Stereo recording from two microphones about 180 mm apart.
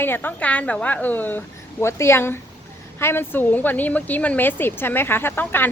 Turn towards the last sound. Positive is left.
turn(degrees=10)  # may be behind; listen again after turning